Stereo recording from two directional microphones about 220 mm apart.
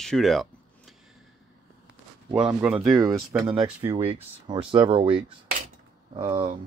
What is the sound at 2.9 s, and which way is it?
Speech, 15° right (ahead or behind).